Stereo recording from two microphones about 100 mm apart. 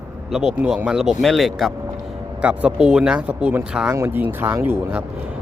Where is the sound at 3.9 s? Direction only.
20° right (ahead or behind).